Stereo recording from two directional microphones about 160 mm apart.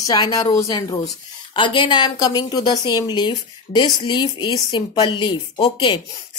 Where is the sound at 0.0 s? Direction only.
25° left (ahead or behind).